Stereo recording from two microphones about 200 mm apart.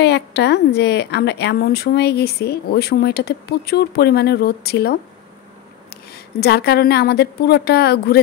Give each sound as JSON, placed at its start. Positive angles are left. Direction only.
{"t": 0.0, "sound": "a woman's voice", "side_deg": 60}
{"t": 6.1, "sound": "a woman's voice", "side_deg": 55}